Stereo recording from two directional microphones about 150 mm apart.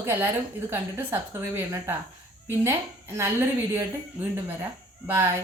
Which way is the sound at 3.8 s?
15° right (ahead or behind).